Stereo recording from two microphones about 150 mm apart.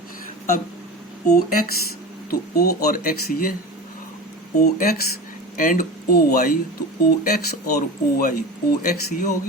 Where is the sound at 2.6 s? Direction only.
85° left.